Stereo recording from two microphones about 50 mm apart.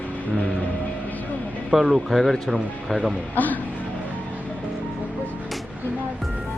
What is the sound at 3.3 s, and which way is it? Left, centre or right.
Speech, left.